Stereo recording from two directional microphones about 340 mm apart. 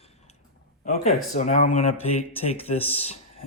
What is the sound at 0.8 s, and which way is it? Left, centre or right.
Speech, left.